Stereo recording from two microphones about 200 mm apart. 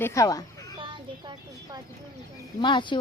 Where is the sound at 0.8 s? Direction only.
25° right (ahead or behind).